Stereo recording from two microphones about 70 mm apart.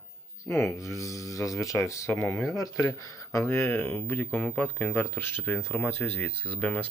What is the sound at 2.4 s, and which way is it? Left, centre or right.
Speech, left.